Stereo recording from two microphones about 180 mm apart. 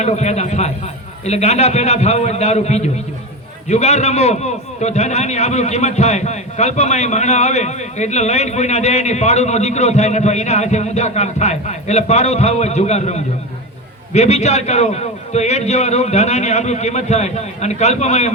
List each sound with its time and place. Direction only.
0.0 s a man's voice: 40° left (ahead or behind)